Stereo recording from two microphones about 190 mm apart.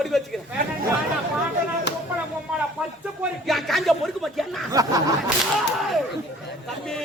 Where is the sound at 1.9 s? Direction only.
65° left (ahead or behind).